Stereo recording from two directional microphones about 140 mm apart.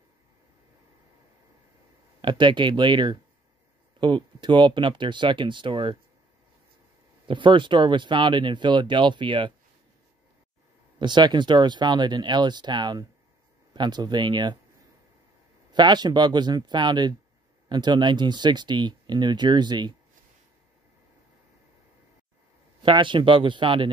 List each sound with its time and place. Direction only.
2.2 s speech: 35° right (ahead or behind)
7.2 s speech: 35° right (ahead or behind)
11.0 s speech: 30° right (ahead or behind)
15.7 s speech: 30° right (ahead or behind)
22.8 s speech: 35° right (ahead or behind)